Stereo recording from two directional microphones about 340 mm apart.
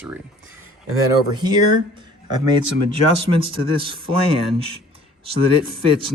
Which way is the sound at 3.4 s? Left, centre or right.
Centre.